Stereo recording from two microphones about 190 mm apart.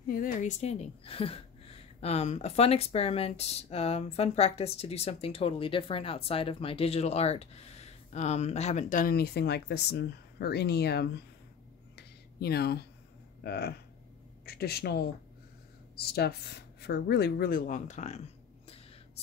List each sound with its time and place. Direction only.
0.1 s speech: 45° left (ahead or behind)
11.9 s a sound: 55° left (ahead or behind)
13.4 s a woman's voice: 60° left (ahead or behind); by 18.2 s 35° left (ahead or behind)